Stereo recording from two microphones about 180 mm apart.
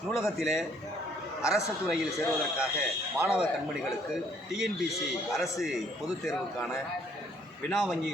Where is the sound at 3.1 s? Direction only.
10° right (ahead or behind).